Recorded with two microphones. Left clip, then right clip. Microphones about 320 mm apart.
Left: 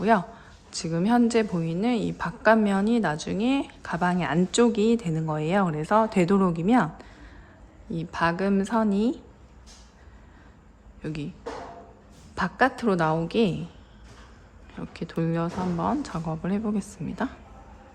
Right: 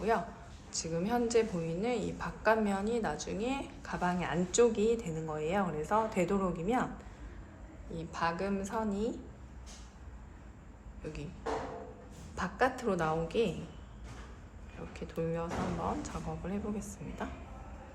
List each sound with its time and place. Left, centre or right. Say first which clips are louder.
0.8 s a woman's voice: left 9 dB; left
7.9 s a woman's voice: left 9 dB; left
11.0 s speech: left 9 dB; left
12.3 s a woman's voice: left 8 dB; left
14.9 s a woman's voice: left 7 dB; left